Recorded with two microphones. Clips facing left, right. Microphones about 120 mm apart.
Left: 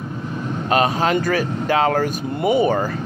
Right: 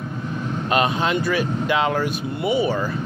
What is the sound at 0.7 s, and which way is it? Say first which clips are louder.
Speech: left 3 dB; 35° left (ahead or behind).